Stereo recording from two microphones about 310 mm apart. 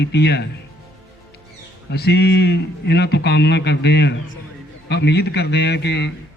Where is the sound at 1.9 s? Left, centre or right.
Left.